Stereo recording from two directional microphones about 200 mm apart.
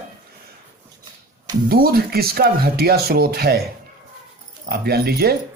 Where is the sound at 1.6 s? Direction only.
50° right (ahead or behind).